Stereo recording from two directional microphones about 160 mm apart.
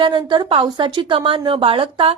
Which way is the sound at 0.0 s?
30° right (ahead or behind).